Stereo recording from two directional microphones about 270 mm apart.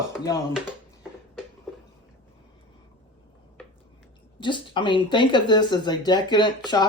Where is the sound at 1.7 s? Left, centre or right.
Centre.